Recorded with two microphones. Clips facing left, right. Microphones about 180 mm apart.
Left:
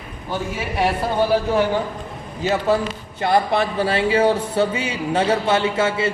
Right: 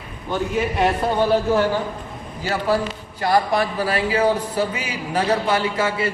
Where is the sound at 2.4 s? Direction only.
20° left (ahead or behind).